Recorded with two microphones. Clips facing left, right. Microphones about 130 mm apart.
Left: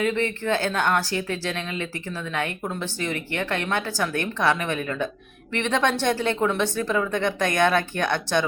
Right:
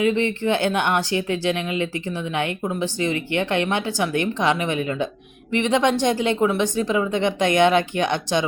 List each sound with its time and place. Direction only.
0.0 s speech: 20° right (ahead or behind)